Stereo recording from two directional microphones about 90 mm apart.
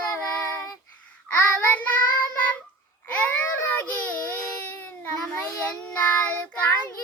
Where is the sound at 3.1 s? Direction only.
15° left (ahead or behind).